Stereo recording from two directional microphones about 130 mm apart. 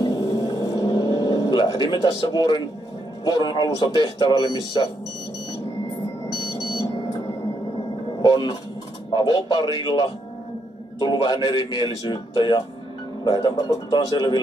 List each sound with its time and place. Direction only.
0.0 s a sound: 30° left (ahead or behind)
3.3 s a man's voice: 35° left (ahead or behind)
6.2 s smoke detector: 30° left (ahead or behind)
8.2 s a man's voice: 30° left (ahead or behind)